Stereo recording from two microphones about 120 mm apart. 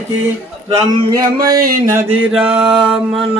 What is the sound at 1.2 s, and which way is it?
Speech, 30° right (ahead or behind).